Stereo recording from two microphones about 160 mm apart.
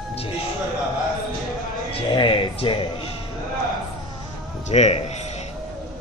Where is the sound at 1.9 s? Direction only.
30° left (ahead or behind).